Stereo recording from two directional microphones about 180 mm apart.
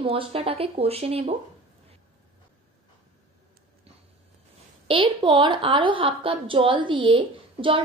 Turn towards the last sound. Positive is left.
turn(degrees=-30)  # may be behind; listen again after turning